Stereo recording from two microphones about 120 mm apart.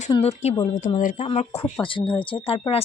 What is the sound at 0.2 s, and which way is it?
Speech, 65° left (ahead or behind).